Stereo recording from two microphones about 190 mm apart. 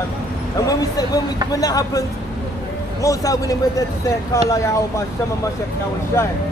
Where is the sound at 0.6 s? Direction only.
20° left (ahead or behind).